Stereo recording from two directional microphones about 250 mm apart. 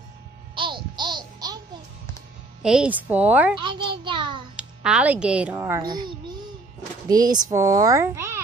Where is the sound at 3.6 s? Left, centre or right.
Centre.